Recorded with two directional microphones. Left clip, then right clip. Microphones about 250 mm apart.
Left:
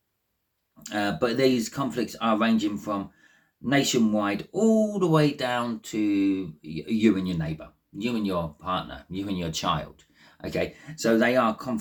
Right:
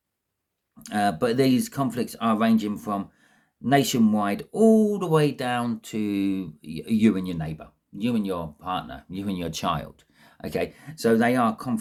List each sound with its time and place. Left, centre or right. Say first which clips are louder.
0.8 s speech: right 2 dB; right